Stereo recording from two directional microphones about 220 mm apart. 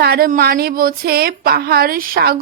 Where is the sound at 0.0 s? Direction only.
45° right (ahead or behind).